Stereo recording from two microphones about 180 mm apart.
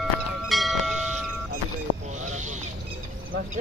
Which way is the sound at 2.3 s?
40° right (ahead or behind).